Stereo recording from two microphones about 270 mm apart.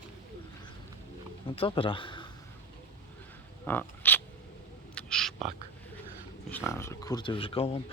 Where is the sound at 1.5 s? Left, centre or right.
Centre.